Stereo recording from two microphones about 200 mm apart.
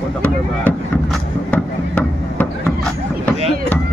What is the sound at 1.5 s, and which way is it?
Chop, 5° left (ahead or behind).